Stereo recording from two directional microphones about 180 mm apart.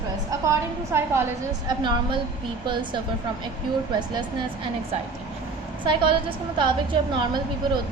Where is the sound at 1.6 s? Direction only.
25° right (ahead or behind).